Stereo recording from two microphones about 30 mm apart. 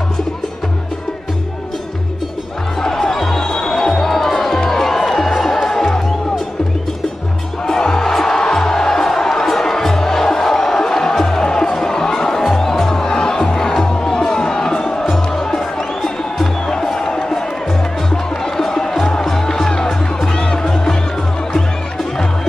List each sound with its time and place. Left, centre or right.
2.8 s music: centre
7.6 s music: left
8.1 s music: centre
14.7 s music: left
18.1 s music: centre